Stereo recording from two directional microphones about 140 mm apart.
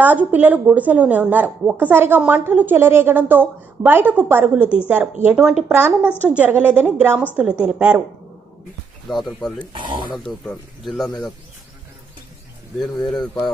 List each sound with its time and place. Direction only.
0.0 s speech: 10° right (ahead or behind)
9.1 s a man's voice: centre (ahead or behind)
9.7 s speech: 35° right (ahead or behind)
10.1 s a man's voice: 5° left (ahead or behind)
13.0 s a man's voice: centre (ahead or behind)